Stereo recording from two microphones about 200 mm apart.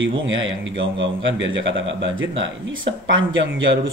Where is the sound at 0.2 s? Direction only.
70° right (ahead or behind).